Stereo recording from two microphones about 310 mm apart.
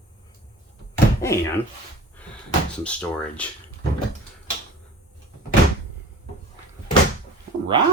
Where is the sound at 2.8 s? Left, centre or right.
Centre.